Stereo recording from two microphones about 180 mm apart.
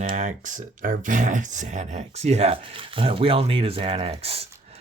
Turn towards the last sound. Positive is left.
turn(degrees=-35)  # may be behind; listen again after turning